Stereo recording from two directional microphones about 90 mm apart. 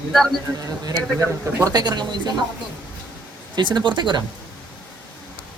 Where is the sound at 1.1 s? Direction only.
35° right (ahead or behind); by 2.2 s 50° right (ahead or behind).